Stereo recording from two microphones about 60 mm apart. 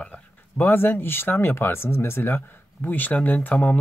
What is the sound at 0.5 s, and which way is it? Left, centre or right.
Speech, left.